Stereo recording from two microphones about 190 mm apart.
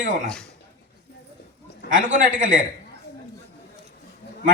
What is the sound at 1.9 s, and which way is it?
Speech, 45° right (ahead or behind).